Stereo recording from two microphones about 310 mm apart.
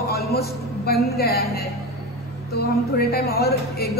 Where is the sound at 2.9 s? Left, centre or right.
Left.